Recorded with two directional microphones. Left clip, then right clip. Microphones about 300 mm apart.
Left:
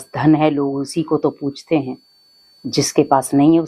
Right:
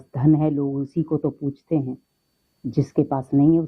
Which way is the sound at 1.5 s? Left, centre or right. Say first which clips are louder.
Left 6 dB; centre.